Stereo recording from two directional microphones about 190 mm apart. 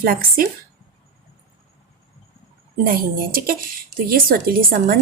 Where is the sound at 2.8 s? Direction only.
50° right (ahead or behind).